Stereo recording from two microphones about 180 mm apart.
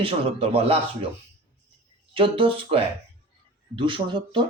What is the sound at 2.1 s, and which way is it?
Speech, 30° right (ahead or behind).